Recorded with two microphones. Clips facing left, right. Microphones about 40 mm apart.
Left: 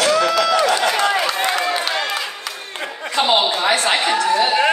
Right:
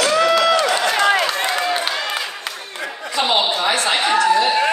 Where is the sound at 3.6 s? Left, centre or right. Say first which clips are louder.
Left 1 dB; left.